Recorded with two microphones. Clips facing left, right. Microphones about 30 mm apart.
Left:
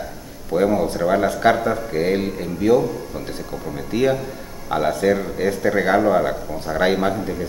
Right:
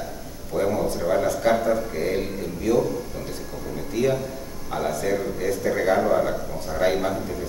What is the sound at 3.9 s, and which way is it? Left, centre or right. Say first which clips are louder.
Speech: left 4 dB; left.